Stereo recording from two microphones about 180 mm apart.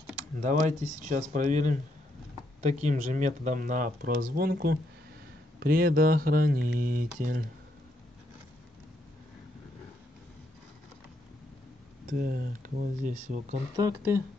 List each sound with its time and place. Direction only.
0.4 s speech: 45° right (ahead or behind)
12.1 s speech: 50° right (ahead or behind)
13.7 s speech: 15° right (ahead or behind)